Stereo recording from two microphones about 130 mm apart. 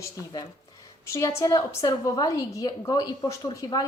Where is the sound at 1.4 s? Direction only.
30° left (ahead or behind).